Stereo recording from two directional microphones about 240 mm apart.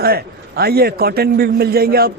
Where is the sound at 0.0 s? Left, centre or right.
Right.